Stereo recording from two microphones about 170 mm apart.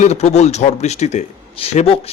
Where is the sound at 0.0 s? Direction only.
40° left (ahead or behind).